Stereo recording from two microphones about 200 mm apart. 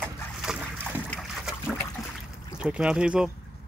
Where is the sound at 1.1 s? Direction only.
Centre (ahead or behind).